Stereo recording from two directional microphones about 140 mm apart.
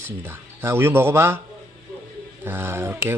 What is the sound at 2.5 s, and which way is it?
Speech, 15° right (ahead or behind).